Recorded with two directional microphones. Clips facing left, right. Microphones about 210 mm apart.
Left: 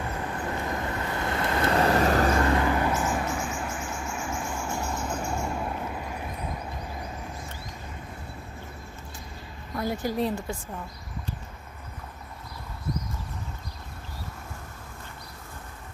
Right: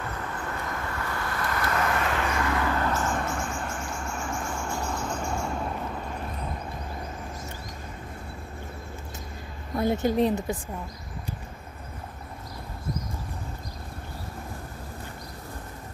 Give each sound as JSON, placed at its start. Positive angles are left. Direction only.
{"t": 0.5, "sound": "vehicle", "side_deg": 20}
{"t": 2.6, "sound": "a sound", "side_deg": 15}
{"t": 9.8, "sound": "a woman's voice", "side_deg": -25}